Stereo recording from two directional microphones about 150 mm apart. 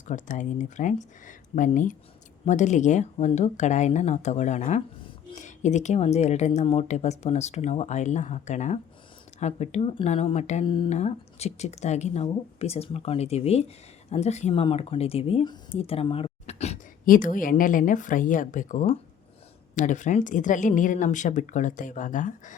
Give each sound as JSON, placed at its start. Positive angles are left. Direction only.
{"t": 0.1, "sound": "a woman's voice", "side_deg": 55}
{"t": 17.1, "sound": "a woman's voice", "side_deg": 65}